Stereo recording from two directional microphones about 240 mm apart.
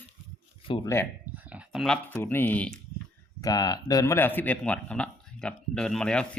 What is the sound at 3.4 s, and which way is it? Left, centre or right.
A man's voice, centre.